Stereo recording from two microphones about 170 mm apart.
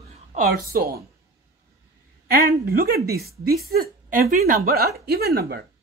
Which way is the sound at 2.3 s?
65° right (ahead or behind).